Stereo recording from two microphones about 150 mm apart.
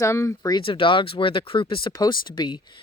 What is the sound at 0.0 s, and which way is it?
Speech, 20° left (ahead or behind).